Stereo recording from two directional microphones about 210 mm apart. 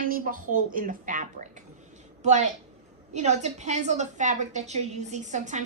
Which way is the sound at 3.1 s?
35° right (ahead or behind).